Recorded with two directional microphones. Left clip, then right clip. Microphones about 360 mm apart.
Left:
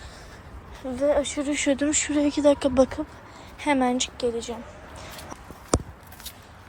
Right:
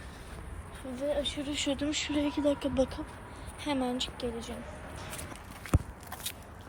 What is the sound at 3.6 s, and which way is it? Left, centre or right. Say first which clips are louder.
Speech: left 10 dB; left.